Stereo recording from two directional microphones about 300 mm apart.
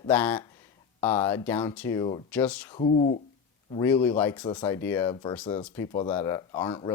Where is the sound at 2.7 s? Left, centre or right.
Left.